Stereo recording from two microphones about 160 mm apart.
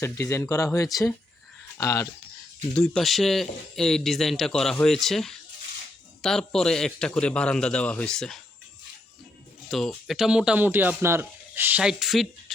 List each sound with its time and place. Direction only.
0.0 s speech: 15° left (ahead or behind)
2.7 s speech: 5° left (ahead or behind)
9.6 s speech: centre (ahead or behind)